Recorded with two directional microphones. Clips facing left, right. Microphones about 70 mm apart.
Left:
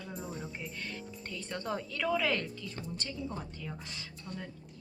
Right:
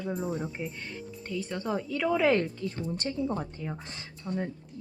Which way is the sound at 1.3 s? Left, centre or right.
Centre.